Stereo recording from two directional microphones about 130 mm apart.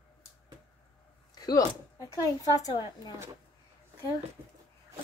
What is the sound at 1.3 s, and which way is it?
A woman's voice, 30° left (ahead or behind).